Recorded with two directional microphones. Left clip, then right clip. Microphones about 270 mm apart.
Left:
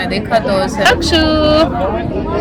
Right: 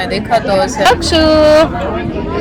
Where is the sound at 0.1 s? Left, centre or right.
Centre.